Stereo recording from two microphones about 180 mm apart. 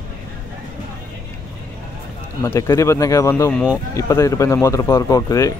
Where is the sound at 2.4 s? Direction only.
15° left (ahead or behind).